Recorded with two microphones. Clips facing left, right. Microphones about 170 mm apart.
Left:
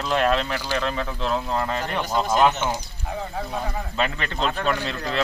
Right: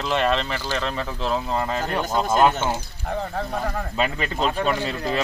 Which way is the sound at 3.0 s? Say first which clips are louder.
Right 3 dB; 55° right (ahead or behind).